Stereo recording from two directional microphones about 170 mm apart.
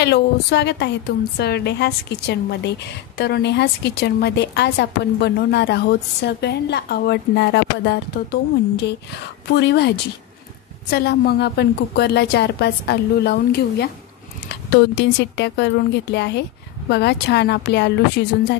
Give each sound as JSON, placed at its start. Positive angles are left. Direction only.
{"t": 0.0, "sound": "a woman's voice", "side_deg": 85}
{"t": 10.9, "sound": "a woman's voice", "side_deg": 70}